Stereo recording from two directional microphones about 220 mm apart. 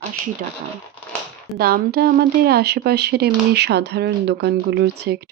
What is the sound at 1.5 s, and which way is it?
Speech, 45° right (ahead or behind).